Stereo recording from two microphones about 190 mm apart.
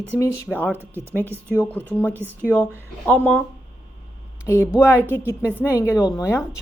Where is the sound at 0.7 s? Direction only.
10° right (ahead or behind).